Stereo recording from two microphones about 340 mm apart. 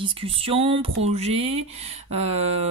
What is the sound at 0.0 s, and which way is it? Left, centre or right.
Speech, centre.